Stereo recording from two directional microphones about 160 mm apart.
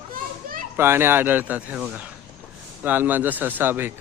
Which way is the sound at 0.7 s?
15° right (ahead or behind).